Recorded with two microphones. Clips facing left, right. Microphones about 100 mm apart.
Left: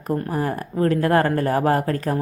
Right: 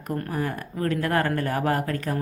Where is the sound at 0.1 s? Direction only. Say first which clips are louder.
Left 5 dB; 35° left (ahead or behind).